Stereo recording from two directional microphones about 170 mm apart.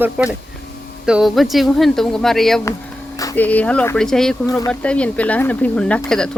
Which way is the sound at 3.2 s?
20° left (ahead or behind).